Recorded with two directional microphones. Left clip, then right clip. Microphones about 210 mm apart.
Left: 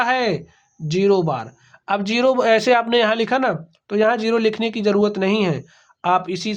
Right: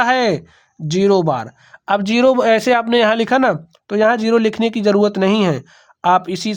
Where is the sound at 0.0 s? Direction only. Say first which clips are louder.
Right 4 dB; 35° right (ahead or behind).